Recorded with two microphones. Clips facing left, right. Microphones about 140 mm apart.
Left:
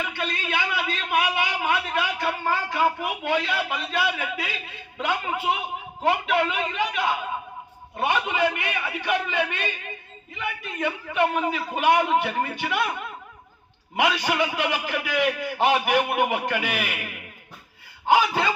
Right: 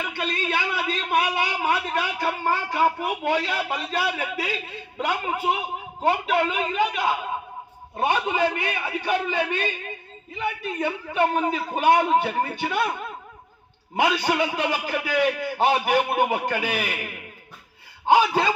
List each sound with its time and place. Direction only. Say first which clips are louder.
0.2 s a man's voice: right 3 dB; 35° right (ahead or behind)
18.0 s speech: right 2 dB; 20° right (ahead or behind)